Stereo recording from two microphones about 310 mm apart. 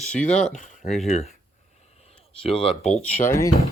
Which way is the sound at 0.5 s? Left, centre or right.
Left.